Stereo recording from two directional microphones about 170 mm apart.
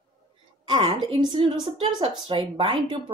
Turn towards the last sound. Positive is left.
turn(degrees=-30)  # may be behind; listen again after turning